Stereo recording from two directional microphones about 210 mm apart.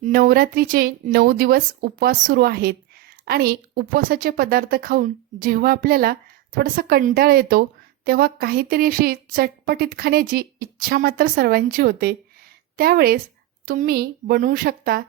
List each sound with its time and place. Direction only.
0.0 s a woman's voice: 45° right (ahead or behind)